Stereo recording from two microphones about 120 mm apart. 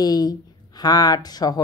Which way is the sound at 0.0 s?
35° left (ahead or behind).